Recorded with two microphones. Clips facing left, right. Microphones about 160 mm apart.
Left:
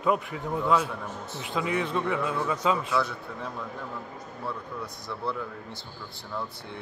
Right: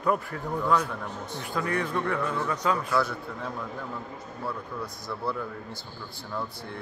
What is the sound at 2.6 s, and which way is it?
Speech, 20° left (ahead or behind).